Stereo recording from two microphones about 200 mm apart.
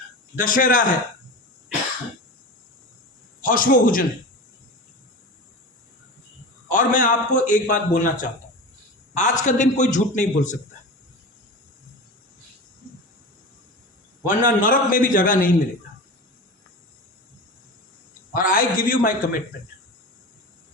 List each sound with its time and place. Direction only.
0.3 s a man's voice: 45° left (ahead or behind)
3.4 s a man's voice: 45° left (ahead or behind)
6.7 s a man's voice: 40° left (ahead or behind)
14.4 s a man's voice: 40° left (ahead or behind)
18.3 s a man's voice: 45° left (ahead or behind)